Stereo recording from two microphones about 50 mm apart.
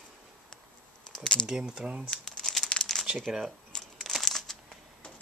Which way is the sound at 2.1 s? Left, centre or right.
Centre.